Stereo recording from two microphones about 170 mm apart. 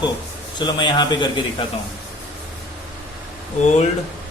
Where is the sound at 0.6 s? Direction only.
25° left (ahead or behind).